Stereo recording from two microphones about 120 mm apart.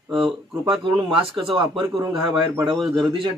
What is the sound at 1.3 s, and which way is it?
A man's voice, 45° right (ahead or behind).